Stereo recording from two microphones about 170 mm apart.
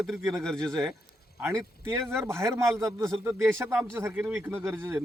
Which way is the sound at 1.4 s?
15° right (ahead or behind).